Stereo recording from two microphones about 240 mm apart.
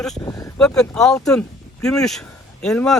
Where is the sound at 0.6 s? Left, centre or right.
Centre.